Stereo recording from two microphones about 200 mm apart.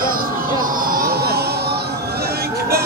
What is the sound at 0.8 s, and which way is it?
Music, 45° right (ahead or behind).